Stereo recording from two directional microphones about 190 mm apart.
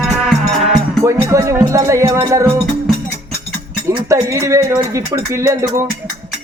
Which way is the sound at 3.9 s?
15° right (ahead or behind).